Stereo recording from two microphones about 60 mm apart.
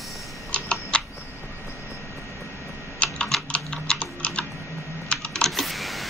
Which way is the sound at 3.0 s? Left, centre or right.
Left.